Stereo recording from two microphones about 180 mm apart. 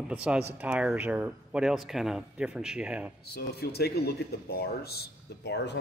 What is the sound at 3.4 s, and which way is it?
Speech, 60° left (ahead or behind).